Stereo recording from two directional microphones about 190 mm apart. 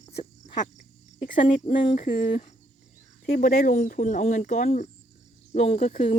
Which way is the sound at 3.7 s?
40° left (ahead or behind).